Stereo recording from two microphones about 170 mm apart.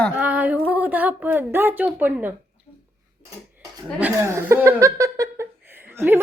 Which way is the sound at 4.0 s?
15° right (ahead or behind).